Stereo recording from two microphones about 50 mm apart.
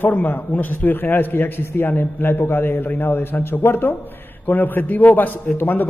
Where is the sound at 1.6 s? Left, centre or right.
Left.